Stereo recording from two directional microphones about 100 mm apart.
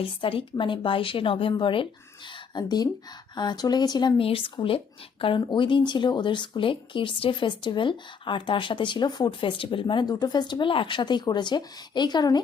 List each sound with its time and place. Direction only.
0.0 s a woman's voice: 65° left (ahead or behind)
2.6 s speech: 40° left (ahead or behind)
4.2 s a woman's voice: 65° left (ahead or behind); by 12.4 s 45° left (ahead or behind)